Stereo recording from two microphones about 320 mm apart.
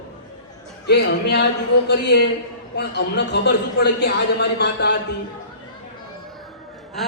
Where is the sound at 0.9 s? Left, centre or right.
Left.